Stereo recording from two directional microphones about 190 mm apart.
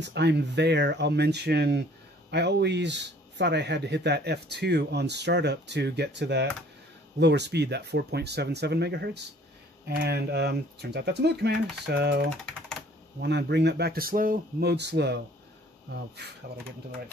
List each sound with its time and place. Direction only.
0.0 s speech: 65° right (ahead or behind)
13.2 s speech: 65° right (ahead or behind)